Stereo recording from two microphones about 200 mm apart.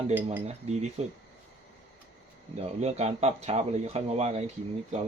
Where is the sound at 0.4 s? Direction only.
35° right (ahead or behind).